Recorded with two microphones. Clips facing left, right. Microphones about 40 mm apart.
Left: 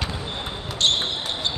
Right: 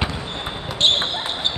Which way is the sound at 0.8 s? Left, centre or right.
Right.